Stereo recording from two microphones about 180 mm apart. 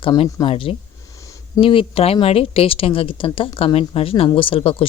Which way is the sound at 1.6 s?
30° left (ahead or behind).